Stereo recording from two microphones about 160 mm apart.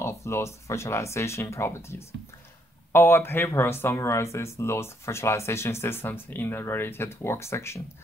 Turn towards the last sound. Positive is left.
turn(degrees=15)  # may be behind; listen again after turning